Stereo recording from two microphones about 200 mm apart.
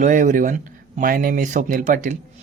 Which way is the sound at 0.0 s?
40° right (ahead or behind).